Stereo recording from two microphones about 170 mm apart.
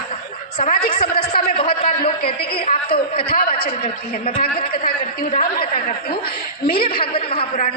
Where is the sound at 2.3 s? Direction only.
60° left (ahead or behind).